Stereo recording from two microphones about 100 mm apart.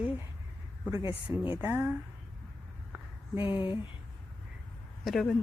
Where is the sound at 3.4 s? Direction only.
55° left (ahead or behind).